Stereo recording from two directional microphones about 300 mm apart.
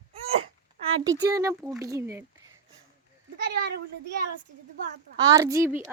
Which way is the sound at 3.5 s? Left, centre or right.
Right.